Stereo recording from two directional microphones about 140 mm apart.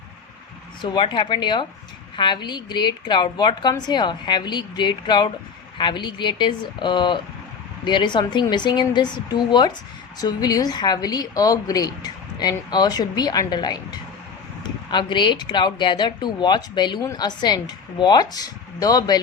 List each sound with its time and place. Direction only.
0.8 s a woman's voice: 35° left (ahead or behind)